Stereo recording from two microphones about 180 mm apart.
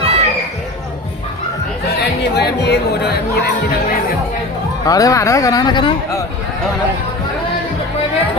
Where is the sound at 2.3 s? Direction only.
65° left (ahead or behind).